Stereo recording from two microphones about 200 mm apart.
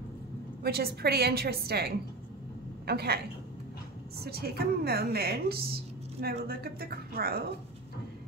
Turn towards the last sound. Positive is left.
turn(degrees=-50)  # may be behind; listen again after turning